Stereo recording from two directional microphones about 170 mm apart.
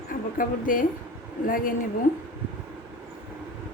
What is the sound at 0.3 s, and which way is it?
A woman's voice, 55° left (ahead or behind).